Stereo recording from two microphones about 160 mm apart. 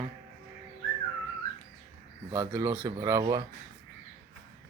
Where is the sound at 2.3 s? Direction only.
20° right (ahead or behind).